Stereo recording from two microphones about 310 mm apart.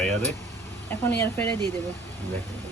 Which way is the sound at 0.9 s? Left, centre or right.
Centre.